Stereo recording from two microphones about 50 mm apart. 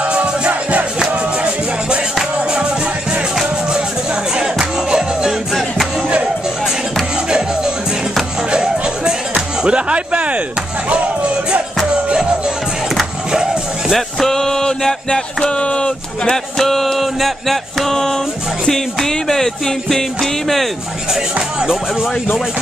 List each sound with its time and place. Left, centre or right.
0.0 s music: right
2.3 s music: centre
4.4 s music: centre
7.2 s music: centre
9.6 s a sound: centre
12.1 s music: centre
13.9 s a sound: centre
18.7 s music: centre
21.1 s speech: centre